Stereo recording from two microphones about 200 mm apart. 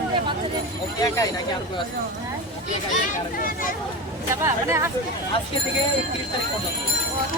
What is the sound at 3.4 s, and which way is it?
Speech, 45° left (ahead or behind).